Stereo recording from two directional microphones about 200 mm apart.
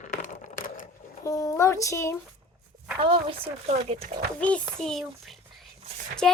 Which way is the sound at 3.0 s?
25° right (ahead or behind).